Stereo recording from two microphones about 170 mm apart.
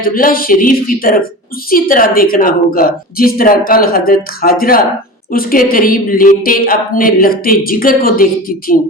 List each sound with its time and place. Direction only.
0.0 s a woman's voice: 55° left (ahead or behind)